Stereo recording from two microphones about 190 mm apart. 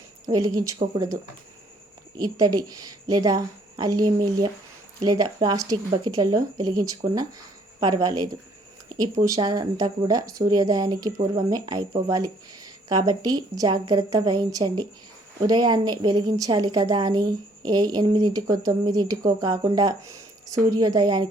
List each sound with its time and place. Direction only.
0.3 s speech: 20° right (ahead or behind)